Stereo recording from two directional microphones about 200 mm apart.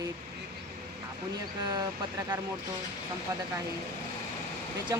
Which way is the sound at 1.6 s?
20° right (ahead or behind).